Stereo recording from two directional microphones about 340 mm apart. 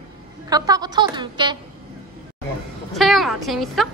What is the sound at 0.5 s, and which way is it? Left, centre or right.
A woman's voice, centre.